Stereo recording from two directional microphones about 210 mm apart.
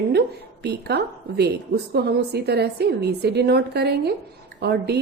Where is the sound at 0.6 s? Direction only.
50° right (ahead or behind).